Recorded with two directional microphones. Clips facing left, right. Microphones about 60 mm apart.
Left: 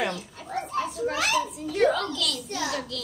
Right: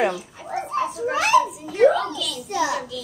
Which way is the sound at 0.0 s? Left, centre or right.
Centre.